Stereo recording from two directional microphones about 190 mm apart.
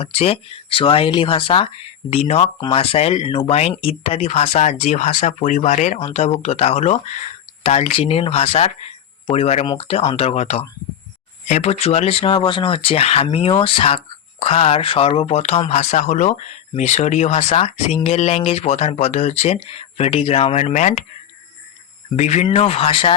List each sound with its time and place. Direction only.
0.0 s speech: 30° left (ahead or behind)
22.1 s speech: 35° left (ahead or behind)